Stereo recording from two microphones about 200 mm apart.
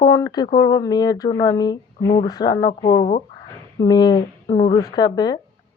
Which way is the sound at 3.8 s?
20° left (ahead or behind).